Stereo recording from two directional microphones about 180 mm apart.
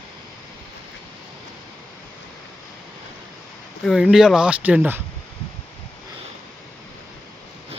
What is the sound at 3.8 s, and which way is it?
Speech, 5° right (ahead or behind).